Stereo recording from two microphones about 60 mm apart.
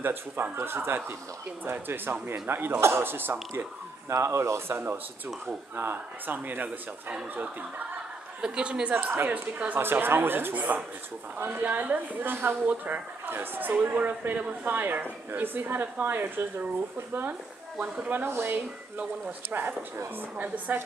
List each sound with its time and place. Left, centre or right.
0.0 s speech: right
4.1 s speech: right
8.4 s a woman's voice: centre
8.9 s speech: right
9.3 s speech: right
9.8 s speech: right
12.6 s speech: right